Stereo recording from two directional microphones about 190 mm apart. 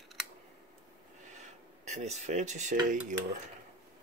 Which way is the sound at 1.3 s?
35° right (ahead or behind).